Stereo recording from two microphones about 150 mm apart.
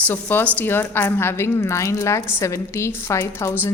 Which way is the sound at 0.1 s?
15° left (ahead or behind).